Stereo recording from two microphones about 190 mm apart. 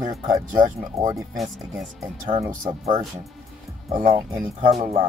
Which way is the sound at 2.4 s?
20° right (ahead or behind).